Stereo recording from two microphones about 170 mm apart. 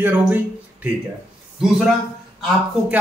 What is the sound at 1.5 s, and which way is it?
Speech, 5° right (ahead or behind).